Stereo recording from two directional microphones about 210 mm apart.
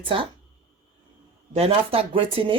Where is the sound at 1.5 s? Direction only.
30° right (ahead or behind).